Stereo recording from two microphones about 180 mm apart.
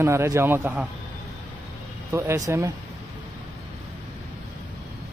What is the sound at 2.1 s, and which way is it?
Speech, 15° right (ahead or behind).